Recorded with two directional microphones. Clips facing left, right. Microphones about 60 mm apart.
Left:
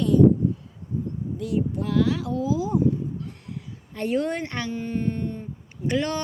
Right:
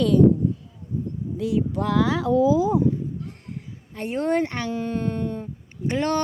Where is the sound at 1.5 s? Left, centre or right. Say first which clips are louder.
Right 2 dB; right.